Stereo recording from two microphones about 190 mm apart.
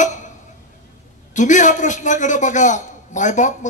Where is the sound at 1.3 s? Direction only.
40° left (ahead or behind).